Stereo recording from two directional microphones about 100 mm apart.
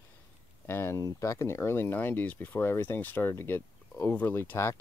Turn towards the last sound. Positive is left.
turn(degrees=25)  # may be behind; listen again after turning